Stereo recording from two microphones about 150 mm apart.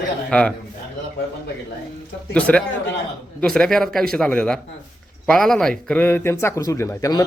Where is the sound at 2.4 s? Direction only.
10° left (ahead or behind).